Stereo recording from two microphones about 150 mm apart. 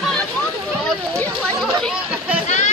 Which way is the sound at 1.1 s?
5° left (ahead or behind).